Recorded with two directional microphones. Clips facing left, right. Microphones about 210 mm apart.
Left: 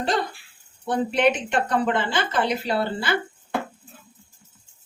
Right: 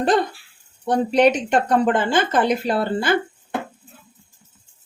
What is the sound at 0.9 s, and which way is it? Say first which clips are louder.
Speech: right 4 dB; 40° right (ahead or behind).